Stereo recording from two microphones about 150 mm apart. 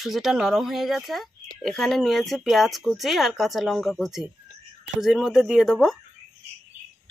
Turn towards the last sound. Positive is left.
turn(degrees=-5)  # may be behind; listen again after turning